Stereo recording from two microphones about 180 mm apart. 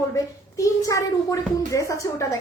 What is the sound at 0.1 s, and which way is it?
A child's voice, 20° left (ahead or behind).